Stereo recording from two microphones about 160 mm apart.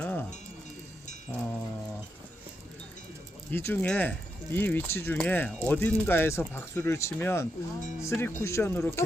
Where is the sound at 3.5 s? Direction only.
15° left (ahead or behind).